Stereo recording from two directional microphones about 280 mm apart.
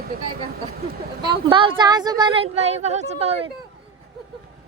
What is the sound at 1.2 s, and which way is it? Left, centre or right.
Speech, centre.